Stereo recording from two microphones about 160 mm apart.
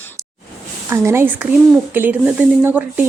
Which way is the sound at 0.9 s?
15° right (ahead or behind).